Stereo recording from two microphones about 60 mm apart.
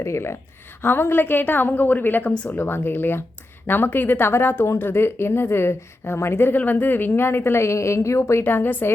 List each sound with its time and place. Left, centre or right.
0.0 s a woman's voice: left
0.8 s speech: left
6.6 s a woman's voice: left
8.4 s speech: left